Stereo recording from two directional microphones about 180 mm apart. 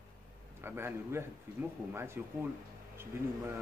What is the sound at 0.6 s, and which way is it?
Speech, 15° right (ahead or behind).